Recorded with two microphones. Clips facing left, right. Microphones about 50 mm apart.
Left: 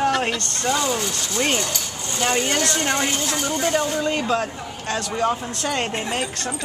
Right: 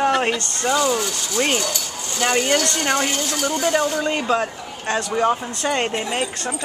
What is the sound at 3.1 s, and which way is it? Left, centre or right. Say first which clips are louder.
Speech: right 1 dB; centre.